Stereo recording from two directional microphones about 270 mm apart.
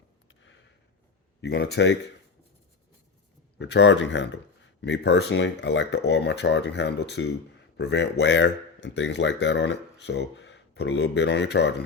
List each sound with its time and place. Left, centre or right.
1.4 s speech: left
3.6 s speech: left